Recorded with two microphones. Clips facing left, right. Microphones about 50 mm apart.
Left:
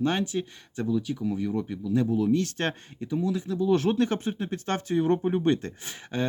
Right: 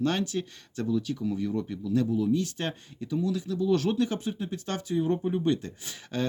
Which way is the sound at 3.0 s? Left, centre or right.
Left.